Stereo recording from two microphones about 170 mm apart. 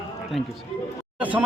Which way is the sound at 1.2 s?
10° right (ahead or behind).